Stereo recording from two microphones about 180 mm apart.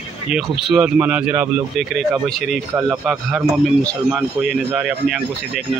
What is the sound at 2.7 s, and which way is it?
Speech, 15° right (ahead or behind).